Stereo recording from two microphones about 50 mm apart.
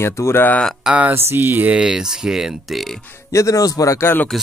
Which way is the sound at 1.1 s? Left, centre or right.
Right.